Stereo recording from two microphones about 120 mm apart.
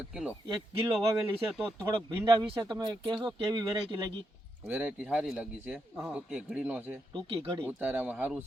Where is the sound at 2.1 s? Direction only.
35° right (ahead or behind).